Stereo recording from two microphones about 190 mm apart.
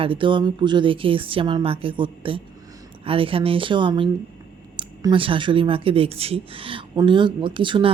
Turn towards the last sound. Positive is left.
turn(degrees=-25)  # may be behind; listen again after turning